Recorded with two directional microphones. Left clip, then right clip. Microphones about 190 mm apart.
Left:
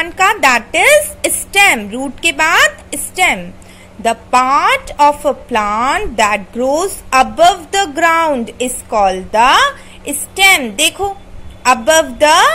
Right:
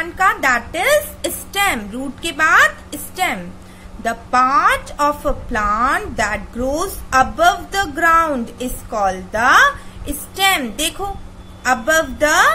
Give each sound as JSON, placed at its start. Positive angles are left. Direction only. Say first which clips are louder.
{"t": 0.0, "sound": "a woman's voice", "louder": "left 5 dB", "side_deg": 30}